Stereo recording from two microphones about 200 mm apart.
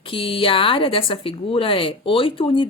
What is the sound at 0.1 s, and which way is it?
Speech, 25° left (ahead or behind).